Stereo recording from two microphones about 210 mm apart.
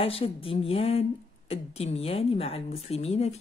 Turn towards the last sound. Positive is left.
turn(degrees=30)  # may be behind; listen again after turning